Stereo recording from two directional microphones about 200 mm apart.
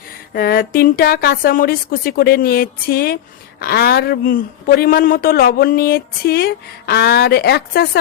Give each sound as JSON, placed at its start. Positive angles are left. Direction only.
{"t": 0.3, "sound": "a man's voice", "side_deg": 45}